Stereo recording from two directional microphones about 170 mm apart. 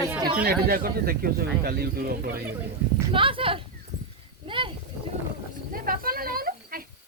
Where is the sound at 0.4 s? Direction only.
60° right (ahead or behind).